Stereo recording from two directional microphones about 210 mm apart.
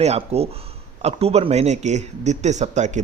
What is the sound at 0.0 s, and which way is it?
Speech, 30° right (ahead or behind).